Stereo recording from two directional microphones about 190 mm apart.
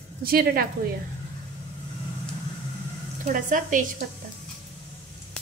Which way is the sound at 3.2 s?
45° right (ahead or behind).